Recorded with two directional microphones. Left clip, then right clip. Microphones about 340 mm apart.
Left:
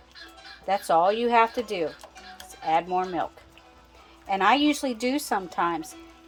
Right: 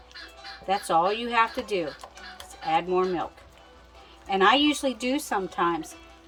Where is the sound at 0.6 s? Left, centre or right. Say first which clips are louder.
Left 2 dB; centre.